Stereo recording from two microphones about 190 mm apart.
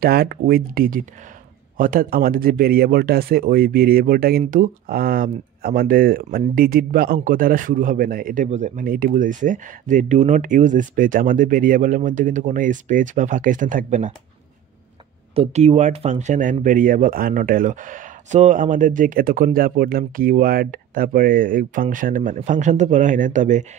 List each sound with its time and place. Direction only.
0.0 s speech: 50° right (ahead or behind)
15.3 s speech: 35° right (ahead or behind)